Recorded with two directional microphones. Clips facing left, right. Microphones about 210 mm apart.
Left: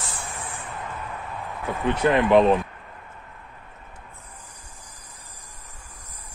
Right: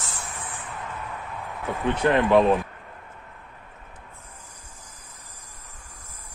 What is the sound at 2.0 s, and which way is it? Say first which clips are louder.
Speech: left 1 dB; 15° left (ahead or behind).